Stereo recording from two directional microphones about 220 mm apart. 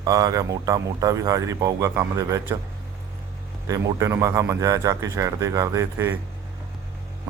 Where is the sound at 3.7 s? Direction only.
15° right (ahead or behind).